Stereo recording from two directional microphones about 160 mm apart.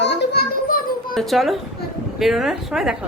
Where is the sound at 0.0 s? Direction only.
85° left.